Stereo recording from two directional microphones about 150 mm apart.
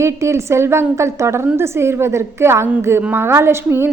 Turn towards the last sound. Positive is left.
turn(degrees=-15)  # may be behind; listen again after turning